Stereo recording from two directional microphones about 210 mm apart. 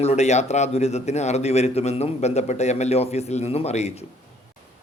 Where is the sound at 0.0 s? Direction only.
30° left (ahead or behind).